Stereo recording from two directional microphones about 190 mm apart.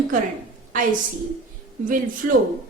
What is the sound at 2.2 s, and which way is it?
Speech, 50° right (ahead or behind).